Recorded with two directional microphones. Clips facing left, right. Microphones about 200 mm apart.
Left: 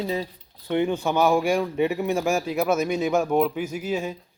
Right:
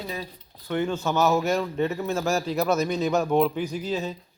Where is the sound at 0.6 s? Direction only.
15° left (ahead or behind).